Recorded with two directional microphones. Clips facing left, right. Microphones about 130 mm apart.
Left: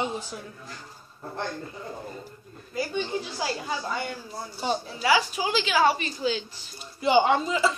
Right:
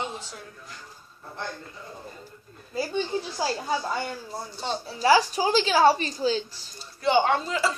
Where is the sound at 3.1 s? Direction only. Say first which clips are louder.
Right 1 dB; 30° right (ahead or behind).